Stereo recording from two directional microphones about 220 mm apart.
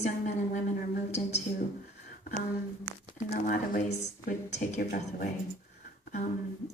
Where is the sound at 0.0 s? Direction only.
35° left (ahead or behind).